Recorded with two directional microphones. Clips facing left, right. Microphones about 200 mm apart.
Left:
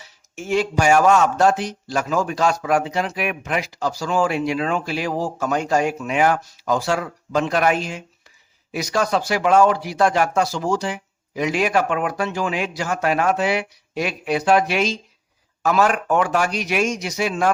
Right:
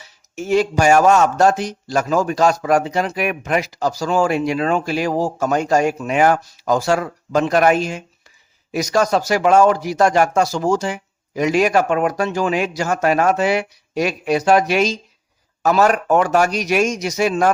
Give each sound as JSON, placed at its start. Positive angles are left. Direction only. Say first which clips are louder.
{"t": 0.3, "sound": "a man's voice", "louder": "right 4 dB", "side_deg": -40}